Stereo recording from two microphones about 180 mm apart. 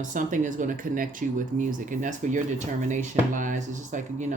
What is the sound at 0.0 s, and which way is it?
Speech, 45° right (ahead or behind).